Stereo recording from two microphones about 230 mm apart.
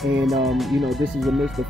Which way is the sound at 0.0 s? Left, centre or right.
Centre.